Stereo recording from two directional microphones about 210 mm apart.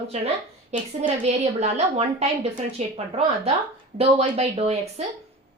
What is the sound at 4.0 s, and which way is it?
Speech, 30° right (ahead or behind).